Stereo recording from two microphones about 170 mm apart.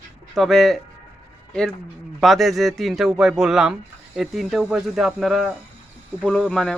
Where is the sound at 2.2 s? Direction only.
Centre (ahead or behind).